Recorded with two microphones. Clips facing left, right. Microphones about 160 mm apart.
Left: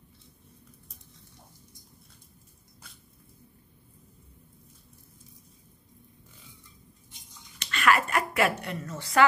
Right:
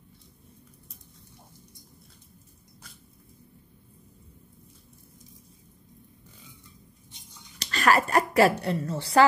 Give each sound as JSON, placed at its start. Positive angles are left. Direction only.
{"t": 7.5, "sound": "a woman's voice", "side_deg": -35}